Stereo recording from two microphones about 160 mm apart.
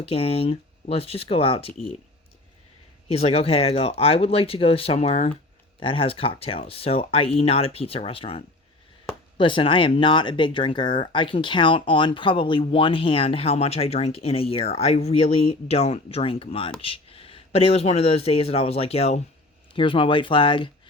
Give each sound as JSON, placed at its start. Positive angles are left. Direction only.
{"t": 0.0, "sound": "speech", "side_deg": 35}
{"t": 3.1, "sound": "speech", "side_deg": 40}